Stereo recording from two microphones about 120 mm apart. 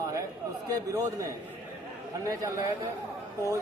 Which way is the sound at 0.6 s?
25° right (ahead or behind).